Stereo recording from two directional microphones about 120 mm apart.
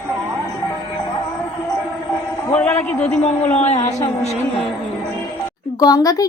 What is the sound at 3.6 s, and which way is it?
Speech, 65° left (ahead or behind).